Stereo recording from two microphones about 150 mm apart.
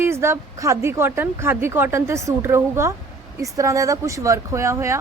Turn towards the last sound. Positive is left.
turn(degrees=-20)  # may be behind; listen again after turning